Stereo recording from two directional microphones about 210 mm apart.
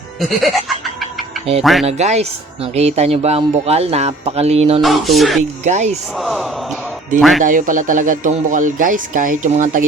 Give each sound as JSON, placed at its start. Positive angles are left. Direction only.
{"t": 0.2, "sound": "speech", "side_deg": 0}
{"t": 1.6, "sound": "speech", "side_deg": 0}
{"t": 1.9, "sound": "speech", "side_deg": -30}
{"t": 4.8, "sound": "speech", "side_deg": 0}
{"t": 5.4, "sound": "speech", "side_deg": -35}
{"t": 6.1, "sound": "speech", "side_deg": 0}
{"t": 7.4, "sound": "speech", "side_deg": -40}